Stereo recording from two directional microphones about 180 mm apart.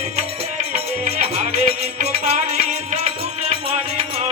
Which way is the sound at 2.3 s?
35° right (ahead or behind).